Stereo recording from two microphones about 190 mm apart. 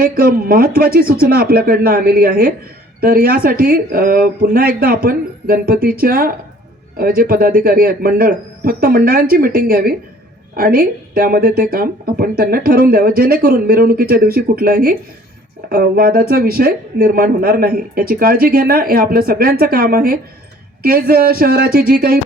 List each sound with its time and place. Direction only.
0.0 s speech: 50° right (ahead or behind)